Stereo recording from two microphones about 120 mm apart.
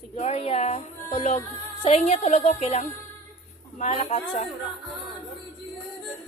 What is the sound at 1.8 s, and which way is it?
Speech, 60° left (ahead or behind).